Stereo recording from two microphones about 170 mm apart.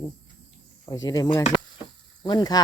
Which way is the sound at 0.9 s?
25° left (ahead or behind).